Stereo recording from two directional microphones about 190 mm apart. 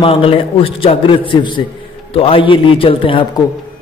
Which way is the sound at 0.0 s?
30° left (ahead or behind).